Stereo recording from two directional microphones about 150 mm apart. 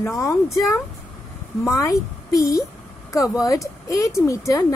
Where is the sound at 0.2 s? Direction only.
20° left (ahead or behind).